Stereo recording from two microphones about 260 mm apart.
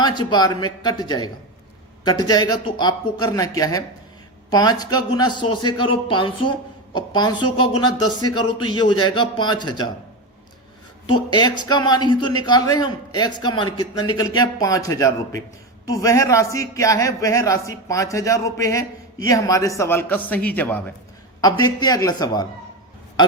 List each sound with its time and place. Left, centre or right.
0.0 s speech: centre
11.0 s speech: centre